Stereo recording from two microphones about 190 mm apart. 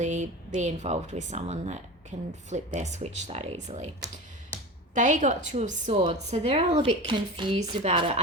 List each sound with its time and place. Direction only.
0.0 s speech: 40° right (ahead or behind)
4.9 s speech: 40° right (ahead or behind)